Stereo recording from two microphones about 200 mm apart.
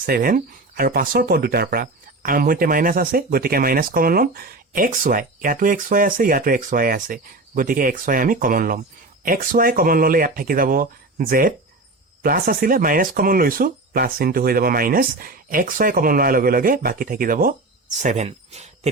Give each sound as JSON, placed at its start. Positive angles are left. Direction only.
{"t": 0.0, "sound": "speech", "side_deg": -45}